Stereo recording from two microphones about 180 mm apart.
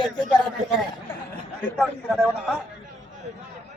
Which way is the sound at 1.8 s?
Centre (ahead or behind).